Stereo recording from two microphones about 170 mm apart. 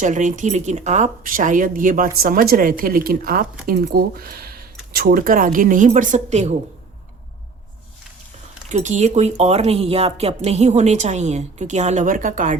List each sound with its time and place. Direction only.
0.0 s speech: 45° right (ahead or behind)
8.7 s speech: 45° right (ahead or behind)